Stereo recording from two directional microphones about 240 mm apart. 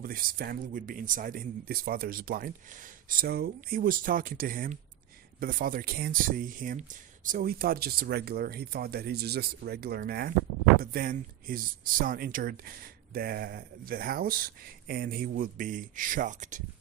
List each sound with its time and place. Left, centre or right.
0.0 s speech: right